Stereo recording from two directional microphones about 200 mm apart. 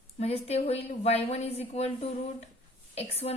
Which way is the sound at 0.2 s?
30° left (ahead or behind).